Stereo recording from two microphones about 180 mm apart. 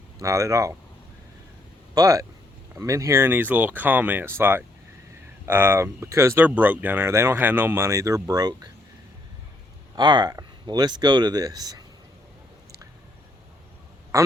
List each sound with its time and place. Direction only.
0.2 s speech: 20° right (ahead or behind)
2.0 s speech: 20° right (ahead or behind)
9.9 s speech: 25° right (ahead or behind)
14.1 s speech: 15° right (ahead or behind)